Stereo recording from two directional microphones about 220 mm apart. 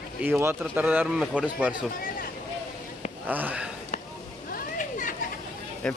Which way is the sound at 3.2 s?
5° right (ahead or behind).